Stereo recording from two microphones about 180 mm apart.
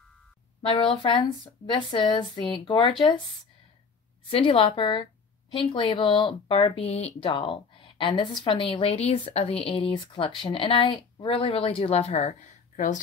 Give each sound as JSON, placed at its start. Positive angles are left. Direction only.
{"t": 0.6, "sound": "speech", "side_deg": 30}
{"t": 4.3, "sound": "speech", "side_deg": 30}